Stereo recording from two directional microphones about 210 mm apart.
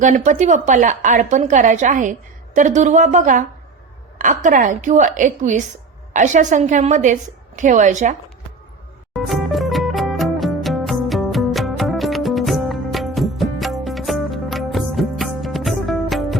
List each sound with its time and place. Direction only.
0.0 s a woman's voice: 35° right (ahead or behind)
4.4 s a woman's voice: 40° right (ahead or behind)
9.1 s music: centre (ahead or behind)